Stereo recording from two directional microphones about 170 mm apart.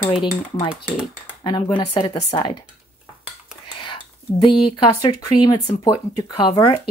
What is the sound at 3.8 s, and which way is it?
Speech, 30° left (ahead or behind).